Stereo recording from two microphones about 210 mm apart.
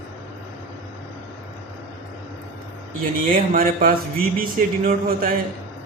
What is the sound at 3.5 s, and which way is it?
Speech, 45° right (ahead or behind).